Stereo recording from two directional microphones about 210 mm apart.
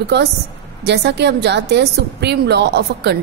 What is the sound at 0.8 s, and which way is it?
A woman's voice, 55° right (ahead or behind).